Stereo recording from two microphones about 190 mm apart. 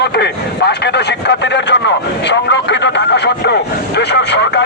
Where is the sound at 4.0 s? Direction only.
65° left (ahead or behind).